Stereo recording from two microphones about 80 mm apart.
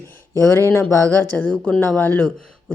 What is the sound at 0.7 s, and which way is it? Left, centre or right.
A woman's voice, left.